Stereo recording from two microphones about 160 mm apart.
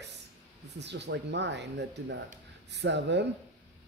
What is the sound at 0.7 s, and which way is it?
Speech, 90° right.